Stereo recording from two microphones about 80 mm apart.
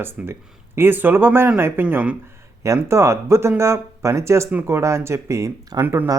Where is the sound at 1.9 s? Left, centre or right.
Centre.